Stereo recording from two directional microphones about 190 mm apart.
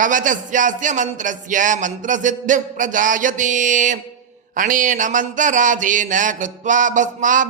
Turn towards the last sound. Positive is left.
turn(degrees=-40)  # may be behind; listen again after turning